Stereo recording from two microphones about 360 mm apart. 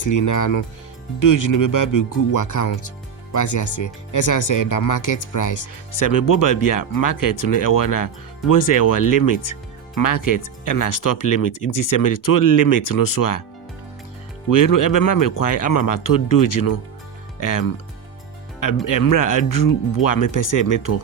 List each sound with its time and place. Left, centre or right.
0.0 s speech: left
14.5 s speech: left
18.9 s speech: left